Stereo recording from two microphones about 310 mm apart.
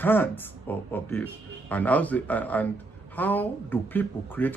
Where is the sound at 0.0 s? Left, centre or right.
Centre.